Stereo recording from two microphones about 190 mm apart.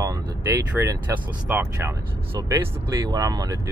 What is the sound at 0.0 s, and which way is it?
Vehicle, 15° right (ahead or behind).